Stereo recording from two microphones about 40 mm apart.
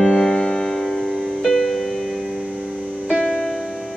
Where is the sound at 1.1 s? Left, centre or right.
Centre.